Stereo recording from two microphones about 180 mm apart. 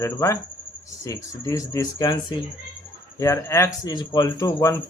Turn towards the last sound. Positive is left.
turn(degrees=20)  # may be behind; listen again after turning